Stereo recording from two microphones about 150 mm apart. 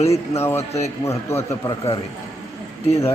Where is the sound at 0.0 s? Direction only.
45° left (ahead or behind).